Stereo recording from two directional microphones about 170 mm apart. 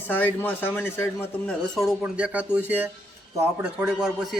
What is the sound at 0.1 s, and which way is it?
A man's voice, 10° left (ahead or behind).